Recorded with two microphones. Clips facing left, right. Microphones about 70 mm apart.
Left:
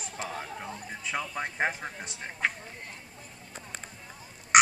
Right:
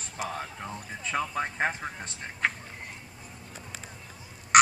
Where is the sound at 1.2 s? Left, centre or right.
Right.